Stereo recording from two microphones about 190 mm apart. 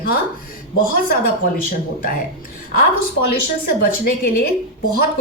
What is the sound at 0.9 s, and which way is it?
Speech, 50° left (ahead or behind).